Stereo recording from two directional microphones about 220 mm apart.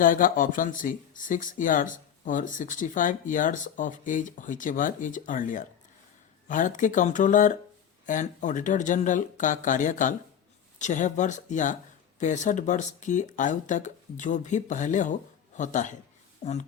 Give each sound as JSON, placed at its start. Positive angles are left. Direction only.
{"t": 0.0, "sound": "speech", "side_deg": 40}